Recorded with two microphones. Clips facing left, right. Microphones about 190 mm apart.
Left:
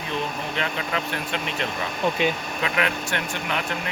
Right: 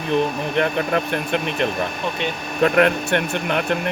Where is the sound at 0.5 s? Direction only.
55° right (ahead or behind).